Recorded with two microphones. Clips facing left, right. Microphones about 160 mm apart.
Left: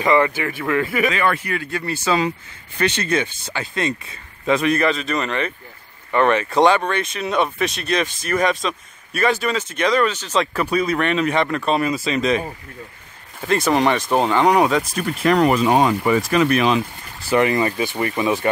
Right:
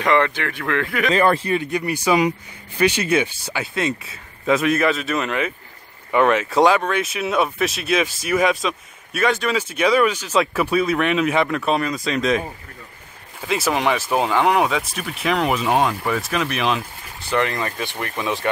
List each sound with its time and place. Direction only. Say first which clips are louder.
0.0 s speech: left 1 dB; 5° left (ahead or behind)
1.1 s speech: right 4 dB; 35° right (ahead or behind); by 18.5 s centre (ahead or behind)